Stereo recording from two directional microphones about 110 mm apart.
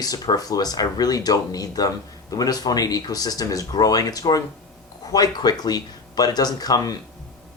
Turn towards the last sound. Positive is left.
turn(degrees=35)  # may be behind; listen again after turning